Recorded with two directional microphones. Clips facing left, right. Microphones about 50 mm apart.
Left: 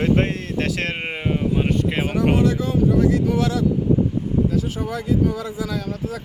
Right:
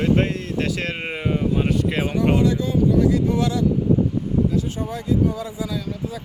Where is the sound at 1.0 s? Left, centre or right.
Left.